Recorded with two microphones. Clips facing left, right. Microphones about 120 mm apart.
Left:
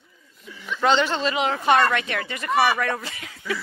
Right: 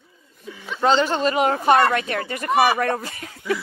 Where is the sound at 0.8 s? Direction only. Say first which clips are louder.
Right 2 dB; 40° right (ahead or behind).